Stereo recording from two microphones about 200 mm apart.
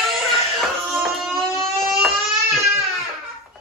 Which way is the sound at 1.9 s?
Centre (ahead or behind).